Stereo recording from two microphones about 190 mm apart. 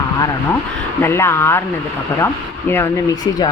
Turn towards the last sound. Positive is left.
turn(degrees=15)  # may be behind; listen again after turning